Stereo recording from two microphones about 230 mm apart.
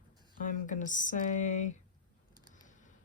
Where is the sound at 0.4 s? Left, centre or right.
Left.